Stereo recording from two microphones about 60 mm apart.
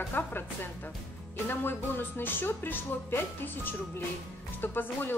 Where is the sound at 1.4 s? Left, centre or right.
Left.